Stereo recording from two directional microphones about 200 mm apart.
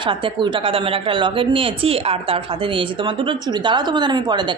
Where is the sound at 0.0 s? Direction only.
25° right (ahead or behind).